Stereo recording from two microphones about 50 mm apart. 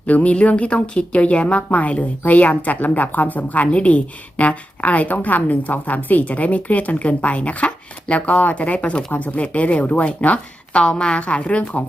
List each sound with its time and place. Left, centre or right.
0.1 s a woman's voice: left